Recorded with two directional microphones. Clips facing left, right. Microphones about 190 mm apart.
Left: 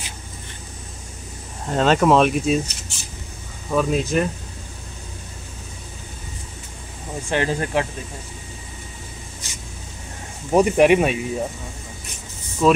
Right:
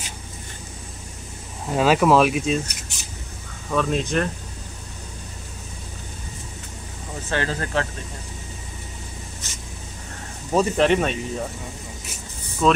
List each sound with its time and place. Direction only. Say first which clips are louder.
1.7 s speech: left 1 dB; 5° right (ahead or behind)
3.7 s speech: left 2 dB; 5° left (ahead or behind)
7.2 s speech: left 4 dB; 15° left (ahead or behind)
9.4 s vehicle: even; 10° left (ahead or behind)
10.5 s speech: left 4 dB; 15° left (ahead or behind)
12.6 s speech: left 2 dB; 5° left (ahead or behind)